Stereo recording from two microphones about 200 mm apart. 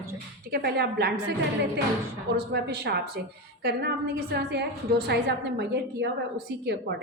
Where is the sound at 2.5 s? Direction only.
55° right (ahead or behind).